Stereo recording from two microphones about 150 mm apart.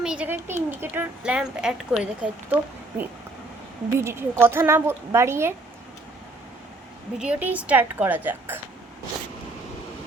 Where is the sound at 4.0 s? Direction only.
15° right (ahead or behind).